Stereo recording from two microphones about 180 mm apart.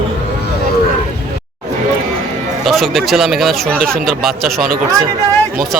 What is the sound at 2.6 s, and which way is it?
Speech, centre (ahead or behind).